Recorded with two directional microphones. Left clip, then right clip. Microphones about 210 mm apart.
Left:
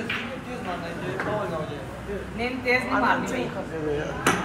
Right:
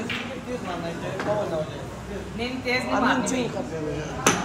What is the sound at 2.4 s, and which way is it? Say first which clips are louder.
Speech: left 2 dB; centre (ahead or behind).